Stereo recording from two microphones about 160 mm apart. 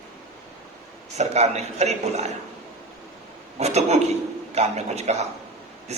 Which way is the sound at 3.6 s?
40° right (ahead or behind).